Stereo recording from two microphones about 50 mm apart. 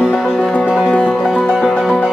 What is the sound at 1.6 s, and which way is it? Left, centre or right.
Music, centre.